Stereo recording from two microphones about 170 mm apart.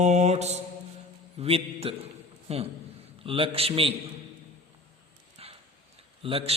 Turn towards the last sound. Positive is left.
turn(degrees=-30)  # may be behind; listen again after turning